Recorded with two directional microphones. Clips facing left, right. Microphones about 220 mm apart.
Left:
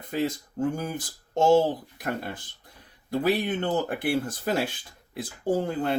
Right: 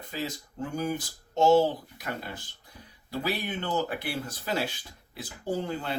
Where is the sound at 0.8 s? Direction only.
50° left (ahead or behind).